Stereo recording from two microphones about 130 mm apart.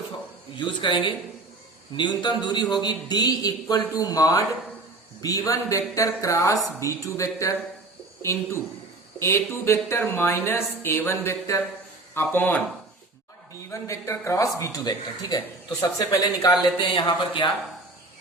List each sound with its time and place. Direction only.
0.5 s speech: 40° left (ahead or behind); by 12.6 s 15° left (ahead or behind)
13.7 s speech: 25° left (ahead or behind)